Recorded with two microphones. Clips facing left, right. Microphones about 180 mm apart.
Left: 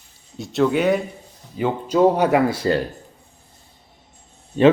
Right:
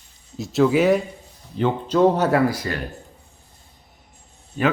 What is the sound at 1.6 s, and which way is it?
Speech, 10° left (ahead or behind).